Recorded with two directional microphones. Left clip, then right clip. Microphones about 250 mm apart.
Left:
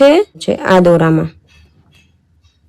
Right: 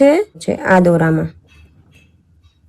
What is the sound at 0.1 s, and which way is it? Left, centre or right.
Speech, left.